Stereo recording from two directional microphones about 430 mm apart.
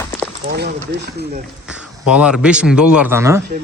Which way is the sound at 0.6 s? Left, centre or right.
Right.